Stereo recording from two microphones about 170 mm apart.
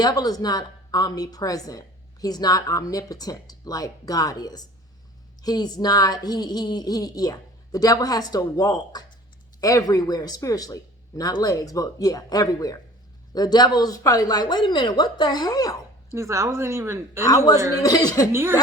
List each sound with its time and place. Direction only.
0.0 s speech: 25° left (ahead or behind)
16.1 s a woman's voice: 15° right (ahead or behind)
17.2 s speech: 20° left (ahead or behind)
18.3 s a woman's voice: 15° right (ahead or behind)